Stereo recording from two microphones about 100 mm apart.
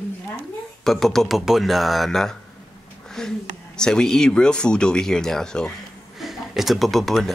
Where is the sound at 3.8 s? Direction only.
5° left (ahead or behind).